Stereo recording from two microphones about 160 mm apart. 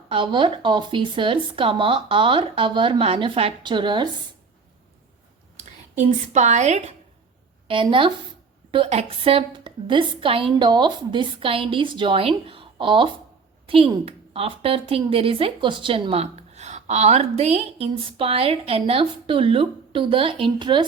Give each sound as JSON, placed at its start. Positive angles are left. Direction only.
{"t": 0.1, "sound": "a woman's voice", "side_deg": -30}
{"t": 6.0, "sound": "a woman's voice", "side_deg": -50}
{"t": 7.7, "sound": "a woman's voice", "side_deg": -30}